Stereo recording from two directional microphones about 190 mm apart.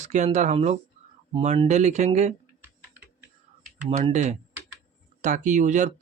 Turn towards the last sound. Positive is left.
turn(degrees=-40)  # may be behind; listen again after turning